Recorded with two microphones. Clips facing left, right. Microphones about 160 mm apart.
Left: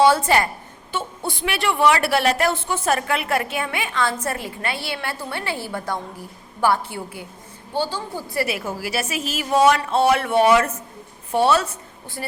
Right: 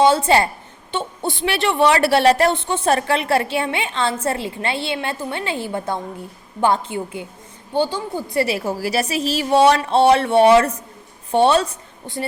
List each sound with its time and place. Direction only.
0.0 s a woman's voice: 25° right (ahead or behind)
8.4 s a woman's voice: 35° right (ahead or behind)